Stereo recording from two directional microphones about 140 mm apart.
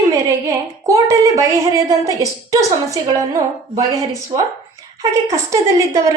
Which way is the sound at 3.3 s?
20° right (ahead or behind).